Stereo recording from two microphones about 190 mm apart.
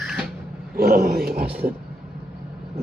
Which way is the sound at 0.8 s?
50° right (ahead or behind).